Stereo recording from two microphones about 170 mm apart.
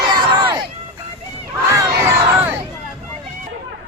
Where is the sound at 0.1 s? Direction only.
25° right (ahead or behind).